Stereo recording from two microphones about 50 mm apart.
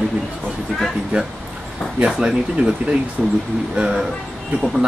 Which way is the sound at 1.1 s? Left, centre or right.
Right.